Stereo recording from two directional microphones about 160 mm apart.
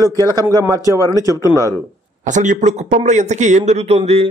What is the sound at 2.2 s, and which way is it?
A man's voice, 50° right (ahead or behind).